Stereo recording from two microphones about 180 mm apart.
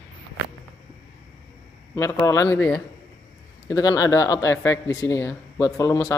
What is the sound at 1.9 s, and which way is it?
A man's voice, 20° left (ahead or behind).